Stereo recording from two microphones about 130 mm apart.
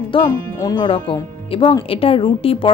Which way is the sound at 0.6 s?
30° left (ahead or behind).